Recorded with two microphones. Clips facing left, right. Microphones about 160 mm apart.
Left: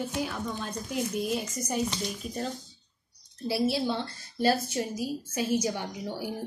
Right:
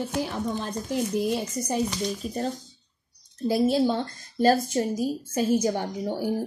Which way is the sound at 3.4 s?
45° right (ahead or behind).